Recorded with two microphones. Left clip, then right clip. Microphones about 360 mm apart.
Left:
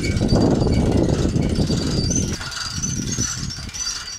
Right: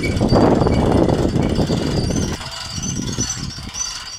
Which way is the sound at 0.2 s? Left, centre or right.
Right.